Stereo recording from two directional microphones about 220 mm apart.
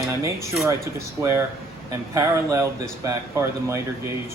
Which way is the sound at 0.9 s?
10° right (ahead or behind).